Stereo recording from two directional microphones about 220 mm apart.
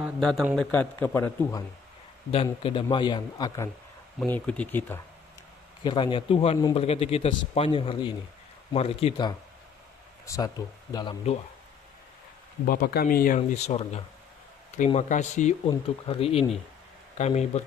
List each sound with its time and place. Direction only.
0.0 s a man's voice: centre (ahead or behind)
2.3 s a man's voice: 25° left (ahead or behind)
5.9 s a man's voice: 20° left (ahead or behind)
12.6 s speech: 40° left (ahead or behind)